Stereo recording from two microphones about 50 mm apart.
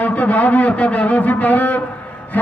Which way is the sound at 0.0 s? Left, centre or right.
Left.